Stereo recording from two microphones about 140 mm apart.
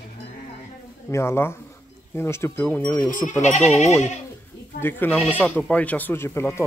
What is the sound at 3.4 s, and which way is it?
Speech, 55° left (ahead or behind).